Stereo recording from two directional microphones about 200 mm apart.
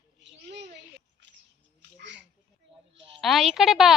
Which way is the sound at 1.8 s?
60° right (ahead or behind).